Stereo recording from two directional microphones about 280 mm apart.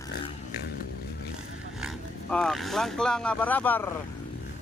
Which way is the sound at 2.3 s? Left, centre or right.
Centre.